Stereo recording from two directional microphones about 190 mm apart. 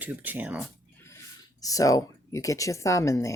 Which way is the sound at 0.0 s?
10° right (ahead or behind).